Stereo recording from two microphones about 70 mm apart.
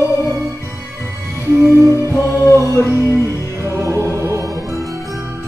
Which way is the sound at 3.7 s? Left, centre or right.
Right.